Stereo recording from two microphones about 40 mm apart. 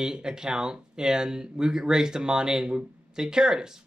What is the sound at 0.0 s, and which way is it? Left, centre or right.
Speech, centre.